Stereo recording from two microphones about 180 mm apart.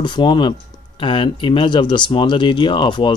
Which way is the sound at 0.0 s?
25° left (ahead or behind).